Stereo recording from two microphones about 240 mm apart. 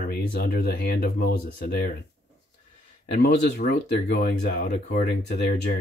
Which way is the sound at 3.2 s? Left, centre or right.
Left.